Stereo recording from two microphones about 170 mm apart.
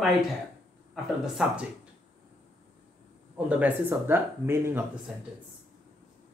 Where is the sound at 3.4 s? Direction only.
10° right (ahead or behind).